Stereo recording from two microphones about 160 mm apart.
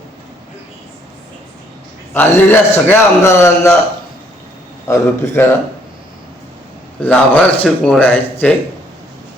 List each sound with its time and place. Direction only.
2.1 s speech: 10° left (ahead or behind)
4.9 s speech: 15° left (ahead or behind)
7.0 s speech: 10° left (ahead or behind)